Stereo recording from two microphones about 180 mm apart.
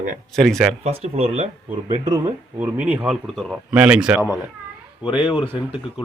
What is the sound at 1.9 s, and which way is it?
Speech, 20° right (ahead or behind).